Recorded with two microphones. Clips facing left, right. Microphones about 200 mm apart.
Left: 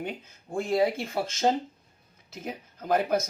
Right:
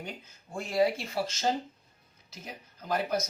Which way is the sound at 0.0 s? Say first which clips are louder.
Left 7 dB; 55° left (ahead or behind).